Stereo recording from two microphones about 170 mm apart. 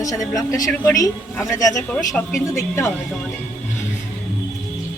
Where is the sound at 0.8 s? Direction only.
20° left (ahead or behind).